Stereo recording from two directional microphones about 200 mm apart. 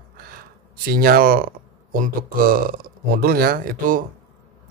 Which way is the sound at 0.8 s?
45° right (ahead or behind).